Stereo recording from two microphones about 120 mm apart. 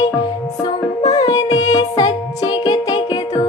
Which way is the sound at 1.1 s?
35° left (ahead or behind).